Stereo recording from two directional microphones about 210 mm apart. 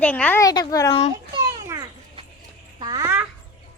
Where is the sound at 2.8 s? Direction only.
15° right (ahead or behind).